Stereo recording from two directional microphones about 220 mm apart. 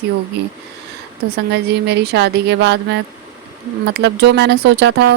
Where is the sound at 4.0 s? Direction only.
50° right (ahead or behind).